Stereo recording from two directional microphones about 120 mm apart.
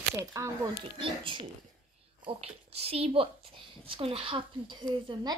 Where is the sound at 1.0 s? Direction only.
45° right (ahead or behind).